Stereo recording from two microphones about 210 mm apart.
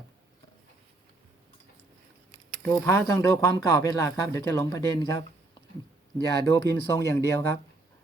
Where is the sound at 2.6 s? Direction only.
15° left (ahead or behind).